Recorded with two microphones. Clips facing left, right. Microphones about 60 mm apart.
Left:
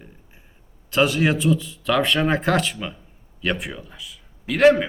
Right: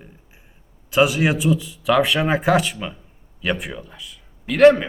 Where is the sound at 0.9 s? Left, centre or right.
Centre.